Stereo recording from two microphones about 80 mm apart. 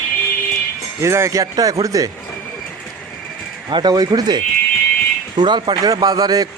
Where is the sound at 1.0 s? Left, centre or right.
Right.